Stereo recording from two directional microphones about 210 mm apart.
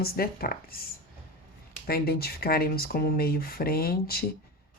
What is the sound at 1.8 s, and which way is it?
Speech, 45° left (ahead or behind).